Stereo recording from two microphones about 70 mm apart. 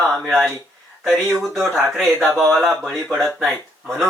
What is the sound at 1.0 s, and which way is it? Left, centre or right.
Speech, centre.